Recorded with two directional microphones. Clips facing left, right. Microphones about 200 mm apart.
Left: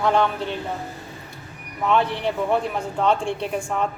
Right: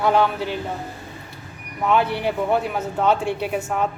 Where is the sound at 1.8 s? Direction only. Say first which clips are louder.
Right 1 dB; 5° right (ahead or behind).